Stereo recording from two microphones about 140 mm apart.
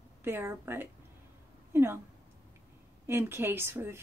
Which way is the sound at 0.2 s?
15° right (ahead or behind).